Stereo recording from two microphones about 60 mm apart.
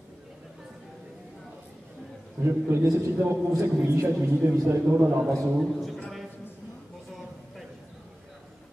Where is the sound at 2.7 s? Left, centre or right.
Right.